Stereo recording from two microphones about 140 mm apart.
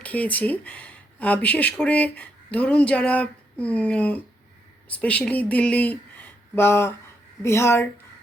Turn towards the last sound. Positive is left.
turn(degrees=20)  # may be behind; listen again after turning